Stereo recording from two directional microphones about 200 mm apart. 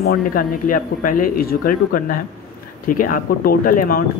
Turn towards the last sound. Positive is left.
turn(degrees=45)  # may be behind; listen again after turning